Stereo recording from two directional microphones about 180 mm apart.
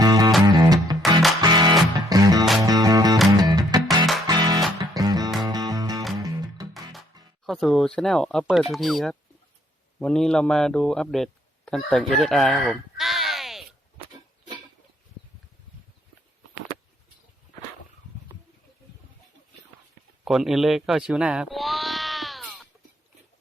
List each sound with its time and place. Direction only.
0.0 s music: 20° right (ahead or behind)
3.8 s music: centre (ahead or behind)
4.3 s music: 20° right (ahead or behind)
7.4 s a man's voice: centre (ahead or behind)
20.2 s speech: centre (ahead or behind)